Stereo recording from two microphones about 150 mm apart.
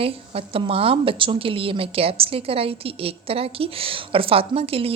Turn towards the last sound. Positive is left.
turn(degrees=-40)  # may be behind; listen again after turning